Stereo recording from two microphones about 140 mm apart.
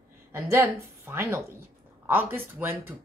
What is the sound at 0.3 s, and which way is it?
A woman's voice, 20° right (ahead or behind).